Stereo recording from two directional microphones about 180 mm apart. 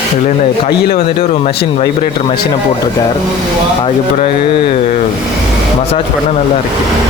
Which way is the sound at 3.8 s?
30° left (ahead or behind).